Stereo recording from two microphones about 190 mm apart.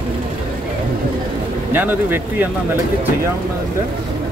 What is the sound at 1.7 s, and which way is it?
Speech, 10° right (ahead or behind).